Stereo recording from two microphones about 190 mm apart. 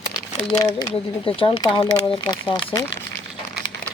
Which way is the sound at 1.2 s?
30° left (ahead or behind).